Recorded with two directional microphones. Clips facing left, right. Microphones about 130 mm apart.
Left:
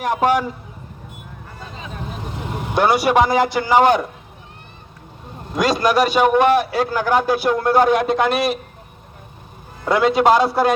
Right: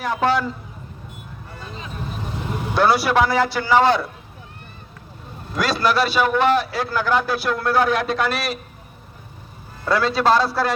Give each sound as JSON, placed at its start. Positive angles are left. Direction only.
{"t": 0.0, "sound": "a man's voice", "side_deg": 15}
{"t": 2.7, "sound": "a man's voice", "side_deg": 15}
{"t": 5.5, "sound": "a man's voice", "side_deg": 15}
{"t": 9.8, "sound": "a man's voice", "side_deg": 20}